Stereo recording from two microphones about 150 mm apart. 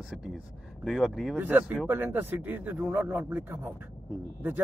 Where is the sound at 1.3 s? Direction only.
10° right (ahead or behind).